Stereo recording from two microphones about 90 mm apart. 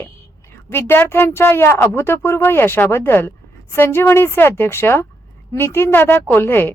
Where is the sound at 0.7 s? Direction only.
25° left (ahead or behind).